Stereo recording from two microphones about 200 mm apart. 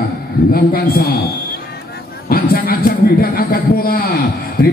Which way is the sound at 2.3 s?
45° left (ahead or behind).